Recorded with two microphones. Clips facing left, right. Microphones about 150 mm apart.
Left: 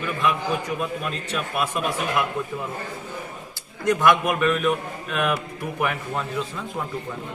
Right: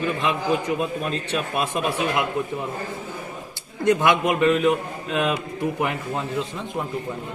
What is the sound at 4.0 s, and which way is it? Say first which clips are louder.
A man's voice: even; 25° right (ahead or behind).